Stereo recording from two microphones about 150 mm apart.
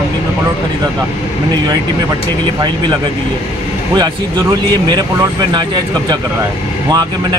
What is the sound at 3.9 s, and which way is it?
Speech, 30° right (ahead or behind).